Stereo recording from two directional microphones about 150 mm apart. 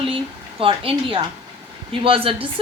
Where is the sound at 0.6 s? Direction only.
35° right (ahead or behind).